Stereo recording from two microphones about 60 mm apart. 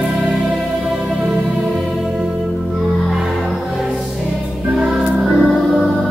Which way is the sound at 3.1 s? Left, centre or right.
Centre.